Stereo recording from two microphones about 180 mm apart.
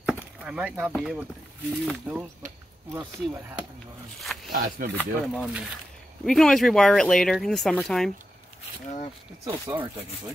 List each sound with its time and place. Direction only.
0.0 s chop: 5° right (ahead or behind)
1.9 s speech: 10° right (ahead or behind)
4.5 s speech: 60° right (ahead or behind)
4.9 s speech: centre (ahead or behind)
9.5 s speech: 30° right (ahead or behind)